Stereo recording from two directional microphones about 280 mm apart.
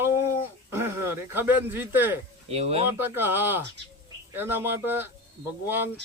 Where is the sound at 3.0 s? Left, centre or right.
Centre.